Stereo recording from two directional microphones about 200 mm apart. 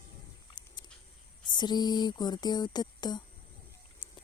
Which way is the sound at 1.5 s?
20° left (ahead or behind).